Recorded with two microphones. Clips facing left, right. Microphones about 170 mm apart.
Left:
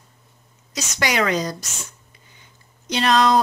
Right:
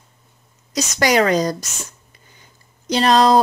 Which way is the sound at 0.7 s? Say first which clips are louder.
Right 6 dB; 40° right (ahead or behind).